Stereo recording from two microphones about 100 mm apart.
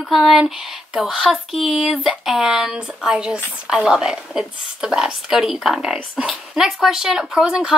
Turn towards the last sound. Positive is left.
turn(degrees=-5)  # may be behind; listen again after turning